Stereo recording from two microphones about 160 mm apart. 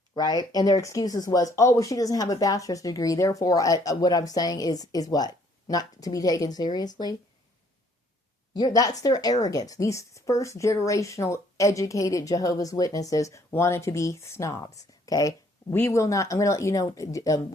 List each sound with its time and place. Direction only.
0.1 s speech: 25° left (ahead or behind)
8.5 s speech: 25° left (ahead or behind)